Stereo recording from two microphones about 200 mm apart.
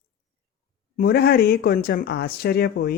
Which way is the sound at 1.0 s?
50° left (ahead or behind).